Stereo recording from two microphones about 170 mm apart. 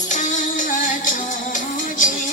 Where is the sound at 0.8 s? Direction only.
50° left (ahead or behind).